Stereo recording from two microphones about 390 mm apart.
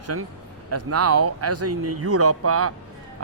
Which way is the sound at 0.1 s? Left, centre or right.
Right.